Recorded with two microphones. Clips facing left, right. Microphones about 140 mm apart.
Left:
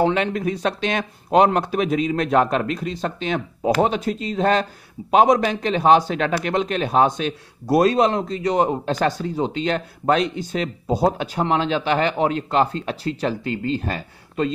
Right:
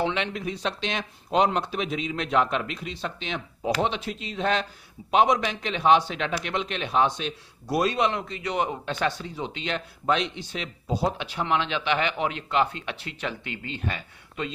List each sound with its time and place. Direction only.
0.0 s speech: 45° left (ahead or behind)